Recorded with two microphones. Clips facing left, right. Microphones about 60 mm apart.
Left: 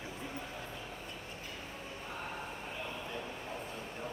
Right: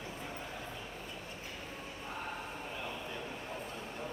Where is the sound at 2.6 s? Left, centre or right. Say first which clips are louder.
Even; centre.